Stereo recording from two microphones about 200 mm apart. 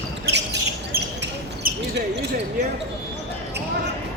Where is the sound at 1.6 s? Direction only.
45° right (ahead or behind).